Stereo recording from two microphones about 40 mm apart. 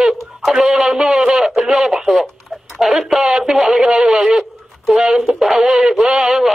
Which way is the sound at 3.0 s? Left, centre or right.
Centre.